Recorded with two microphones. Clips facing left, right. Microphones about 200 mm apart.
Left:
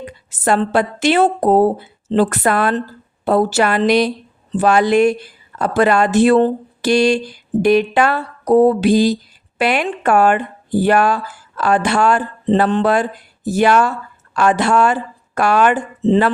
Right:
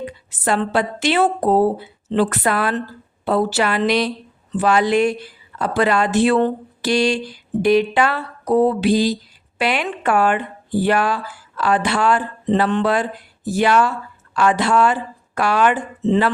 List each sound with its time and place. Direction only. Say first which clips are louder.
0.0 s a woman's voice: left 3 dB; 45° left (ahead or behind)
2.0 s a sound: left 3 dB; 45° left (ahead or behind)
16.0 s speech: left 3 dB; 30° left (ahead or behind)